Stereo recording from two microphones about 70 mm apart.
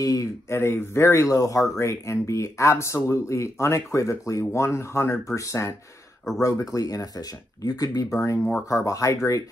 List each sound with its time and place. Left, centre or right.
0.0 s speech: left
0.5 s speech: left
1.3 s speech: left
6.4 s speech: left
8.1 s speech: left